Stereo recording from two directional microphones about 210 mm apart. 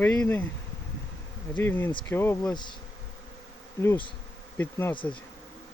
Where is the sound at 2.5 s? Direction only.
20° left (ahead or behind).